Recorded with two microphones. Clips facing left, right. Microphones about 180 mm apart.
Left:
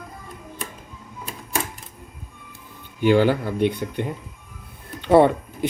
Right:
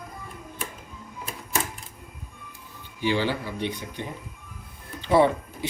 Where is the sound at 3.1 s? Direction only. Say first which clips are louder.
Left 9 dB; 50° left (ahead or behind).